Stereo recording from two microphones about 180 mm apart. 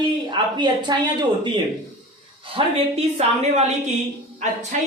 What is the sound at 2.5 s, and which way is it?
A woman's voice, 35° right (ahead or behind).